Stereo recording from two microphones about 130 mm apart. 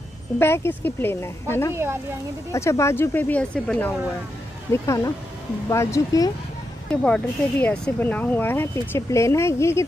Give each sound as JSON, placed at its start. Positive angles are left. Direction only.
{"t": 0.4, "sound": "speech", "side_deg": 20}
{"t": 4.8, "sound": "speech", "side_deg": 25}
{"t": 6.9, "sound": "speech", "side_deg": 5}